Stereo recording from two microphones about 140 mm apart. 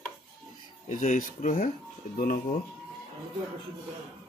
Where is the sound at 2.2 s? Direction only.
90° left.